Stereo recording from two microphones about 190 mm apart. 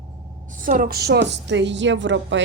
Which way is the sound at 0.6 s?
50° right (ahead or behind).